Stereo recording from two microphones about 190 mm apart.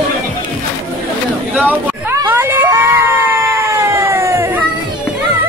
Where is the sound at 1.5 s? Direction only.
10° right (ahead or behind).